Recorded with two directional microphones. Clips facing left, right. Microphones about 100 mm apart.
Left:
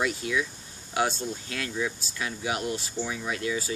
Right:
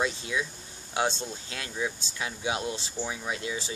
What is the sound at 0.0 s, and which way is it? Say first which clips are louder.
Speech: left 2 dB; 25° right (ahead or behind).